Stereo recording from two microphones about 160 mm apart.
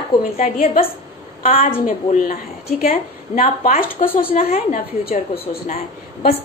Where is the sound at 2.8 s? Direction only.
65° left (ahead or behind).